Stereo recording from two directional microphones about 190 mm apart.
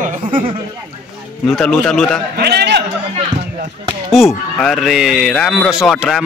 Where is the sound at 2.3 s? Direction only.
60° right (ahead or behind).